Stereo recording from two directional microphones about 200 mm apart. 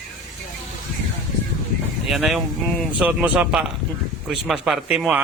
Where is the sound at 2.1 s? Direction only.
Centre (ahead or behind).